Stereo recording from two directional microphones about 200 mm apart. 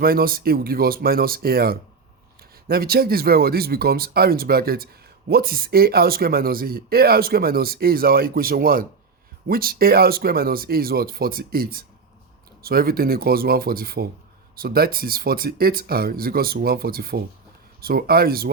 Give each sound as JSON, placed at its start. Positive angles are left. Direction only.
{"t": 0.0, "sound": "speech", "side_deg": -50}